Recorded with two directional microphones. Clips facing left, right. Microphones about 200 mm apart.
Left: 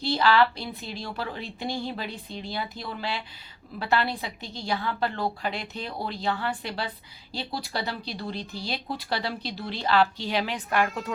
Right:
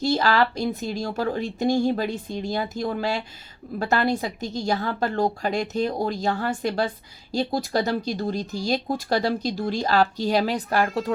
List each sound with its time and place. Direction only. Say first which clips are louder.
0.0 s speech: right 1 dB; 45° right (ahead or behind)